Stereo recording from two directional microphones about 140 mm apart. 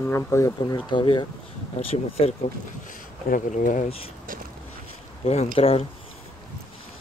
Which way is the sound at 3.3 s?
70° left (ahead or behind).